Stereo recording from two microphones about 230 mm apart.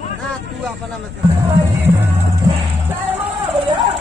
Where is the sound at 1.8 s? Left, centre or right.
Centre.